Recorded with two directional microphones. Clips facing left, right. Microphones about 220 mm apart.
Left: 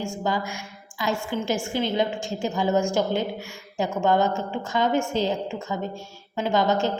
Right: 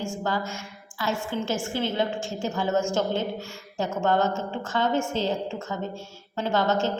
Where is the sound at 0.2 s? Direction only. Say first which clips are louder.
Left 2 dB; 15° left (ahead or behind).